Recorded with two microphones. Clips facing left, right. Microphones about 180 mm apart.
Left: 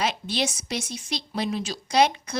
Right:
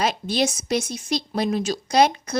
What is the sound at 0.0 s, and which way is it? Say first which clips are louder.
A woman's voice: right 4 dB; 45° right (ahead or behind).